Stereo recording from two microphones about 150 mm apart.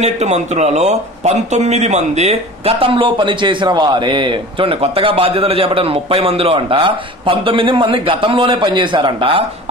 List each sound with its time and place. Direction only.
0.0 s speech: 50° right (ahead or behind)